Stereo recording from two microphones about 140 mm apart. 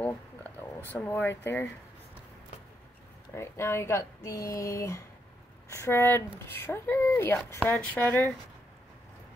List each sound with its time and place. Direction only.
0.0 s a sound: 10° left (ahead or behind)
0.9 s speech: 15° left (ahead or behind)
3.3 s speech: 20° left (ahead or behind)